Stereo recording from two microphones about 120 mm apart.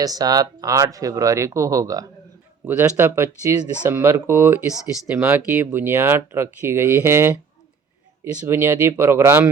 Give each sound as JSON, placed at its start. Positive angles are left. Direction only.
{"t": 0.0, "sound": "speech", "side_deg": -35}
{"t": 2.6, "sound": "speech", "side_deg": -15}